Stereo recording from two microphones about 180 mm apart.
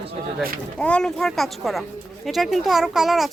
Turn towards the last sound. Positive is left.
turn(degrees=0)  # may be behind; listen again after turning